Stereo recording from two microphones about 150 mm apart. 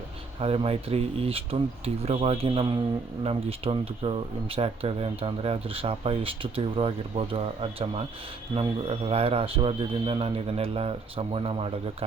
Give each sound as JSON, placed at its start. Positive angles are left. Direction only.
{"t": 0.3, "sound": "speech", "side_deg": -40}